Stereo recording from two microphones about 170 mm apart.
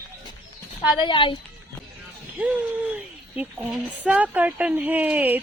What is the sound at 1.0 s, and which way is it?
Speech, 30° left (ahead or behind).